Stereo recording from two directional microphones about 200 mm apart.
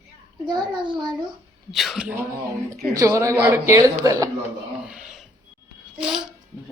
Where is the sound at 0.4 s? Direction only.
20° right (ahead or behind).